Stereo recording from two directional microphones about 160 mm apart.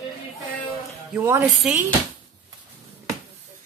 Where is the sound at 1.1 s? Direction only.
15° right (ahead or behind).